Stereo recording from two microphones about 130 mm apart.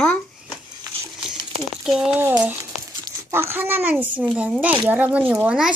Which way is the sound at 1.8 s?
5° right (ahead or behind).